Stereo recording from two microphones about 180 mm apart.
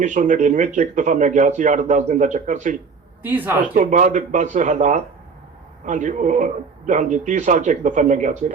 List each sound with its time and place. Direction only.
0.0 s a man's voice: 45° right (ahead or behind)
3.2 s speech: 10° right (ahead or behind)
3.8 s a man's voice: 45° right (ahead or behind)